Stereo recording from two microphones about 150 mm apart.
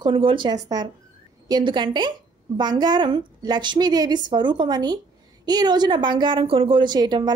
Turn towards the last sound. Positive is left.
turn(degrees=-30)  # may be behind; listen again after turning